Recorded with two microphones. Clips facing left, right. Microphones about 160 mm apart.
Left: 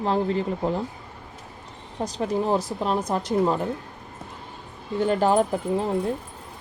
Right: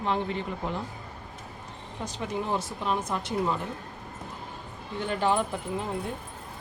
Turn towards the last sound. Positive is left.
turn(degrees=40)  # may be behind; listen again after turning